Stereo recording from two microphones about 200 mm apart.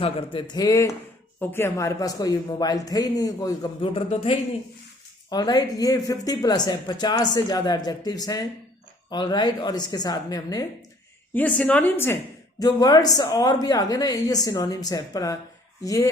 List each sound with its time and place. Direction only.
0.0 s a man's voice: 25° left (ahead or behind)
11.3 s a man's voice: 5° left (ahead or behind)